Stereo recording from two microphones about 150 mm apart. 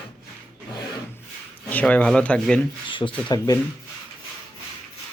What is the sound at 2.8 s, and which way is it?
Speech, 35° left (ahead or behind).